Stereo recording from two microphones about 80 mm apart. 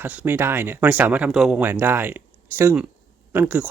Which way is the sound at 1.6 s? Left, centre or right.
Right.